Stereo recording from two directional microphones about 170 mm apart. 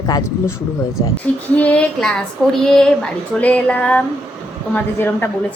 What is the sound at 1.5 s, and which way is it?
Child singing, 10° left (ahead or behind).